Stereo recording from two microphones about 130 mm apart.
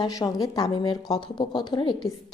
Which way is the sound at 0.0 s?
30° left (ahead or behind).